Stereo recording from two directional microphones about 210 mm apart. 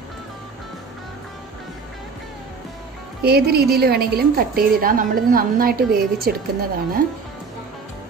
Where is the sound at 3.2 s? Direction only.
50° right (ahead or behind).